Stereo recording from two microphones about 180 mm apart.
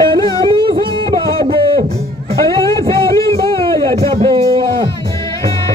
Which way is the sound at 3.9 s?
30° right (ahead or behind).